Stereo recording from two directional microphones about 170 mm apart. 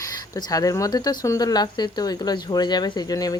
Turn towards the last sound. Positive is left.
turn(degrees=20)  # may be behind; listen again after turning